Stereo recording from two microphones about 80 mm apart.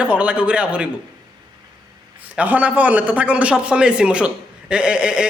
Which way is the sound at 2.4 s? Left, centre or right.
Centre.